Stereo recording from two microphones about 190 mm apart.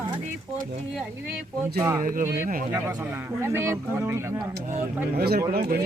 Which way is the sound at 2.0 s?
45° right (ahead or behind).